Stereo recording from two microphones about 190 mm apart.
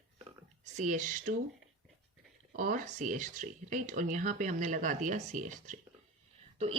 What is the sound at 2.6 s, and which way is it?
Speech, 45° right (ahead or behind).